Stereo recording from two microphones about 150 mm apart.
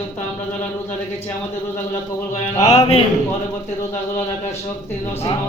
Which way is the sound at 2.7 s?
45° left (ahead or behind).